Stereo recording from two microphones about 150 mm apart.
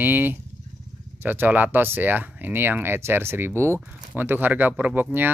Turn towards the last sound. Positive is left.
turn(degrees=-15)  # may be behind; listen again after turning